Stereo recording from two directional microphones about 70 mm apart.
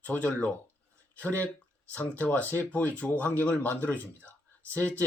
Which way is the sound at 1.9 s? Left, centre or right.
Left.